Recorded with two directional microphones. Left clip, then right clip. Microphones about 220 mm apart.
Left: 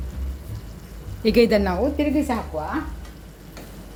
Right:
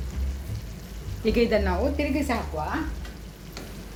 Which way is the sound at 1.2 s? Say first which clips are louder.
Left 5 dB; 50° left (ahead or behind).